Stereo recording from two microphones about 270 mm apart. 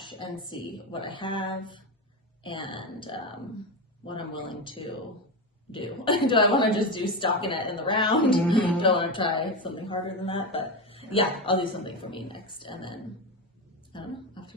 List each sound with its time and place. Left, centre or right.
0.0 s a man's voice: centre